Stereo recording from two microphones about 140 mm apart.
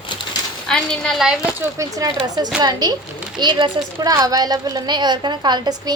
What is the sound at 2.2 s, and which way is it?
Speech, 30° right (ahead or behind).